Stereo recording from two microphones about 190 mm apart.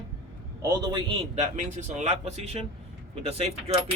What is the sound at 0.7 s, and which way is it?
A man's voice, 25° right (ahead or behind).